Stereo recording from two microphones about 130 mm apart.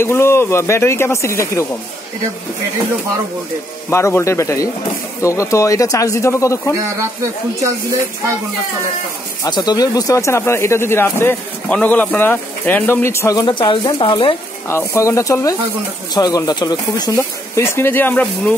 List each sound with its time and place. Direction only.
0.0 s speech: 20° left (ahead or behind)
3.9 s speech: 20° left (ahead or behind)
9.4 s speech: 30° left (ahead or behind)
14.7 s speech: 20° left (ahead or behind)